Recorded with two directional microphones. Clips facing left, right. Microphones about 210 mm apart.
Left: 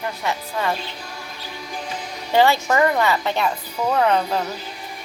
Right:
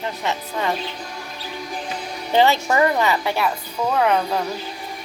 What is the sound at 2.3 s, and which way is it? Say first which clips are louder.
Speech: even; 20° right (ahead or behind).